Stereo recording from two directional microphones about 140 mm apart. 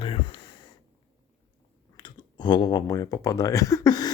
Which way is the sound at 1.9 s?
30° left (ahead or behind).